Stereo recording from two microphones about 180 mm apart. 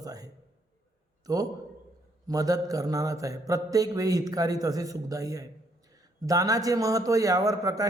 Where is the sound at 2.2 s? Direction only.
20° right (ahead or behind).